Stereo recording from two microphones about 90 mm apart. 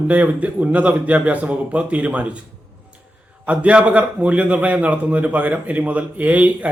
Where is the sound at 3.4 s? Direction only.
15° right (ahead or behind).